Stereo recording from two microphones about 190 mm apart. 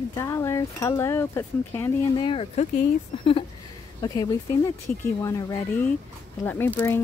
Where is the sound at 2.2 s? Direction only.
30° left (ahead or behind).